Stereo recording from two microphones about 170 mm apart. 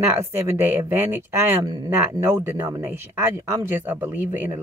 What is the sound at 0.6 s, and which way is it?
Speech, 10° right (ahead or behind).